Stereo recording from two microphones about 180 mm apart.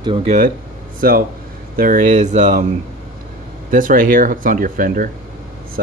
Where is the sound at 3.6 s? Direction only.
50° right (ahead or behind).